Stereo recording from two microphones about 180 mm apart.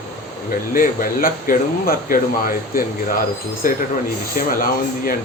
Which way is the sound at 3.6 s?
50° left (ahead or behind).